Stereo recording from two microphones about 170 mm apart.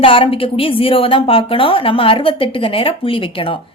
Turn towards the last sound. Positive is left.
turn(degrees=30)  # may be behind; listen again after turning